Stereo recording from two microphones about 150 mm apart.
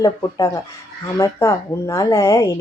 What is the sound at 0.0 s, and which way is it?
Speech, 25° left (ahead or behind).